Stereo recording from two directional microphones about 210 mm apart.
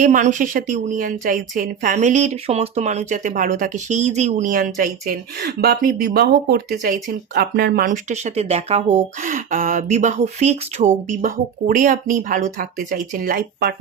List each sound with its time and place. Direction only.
0.0 s a woman's voice: 35° right (ahead or behind)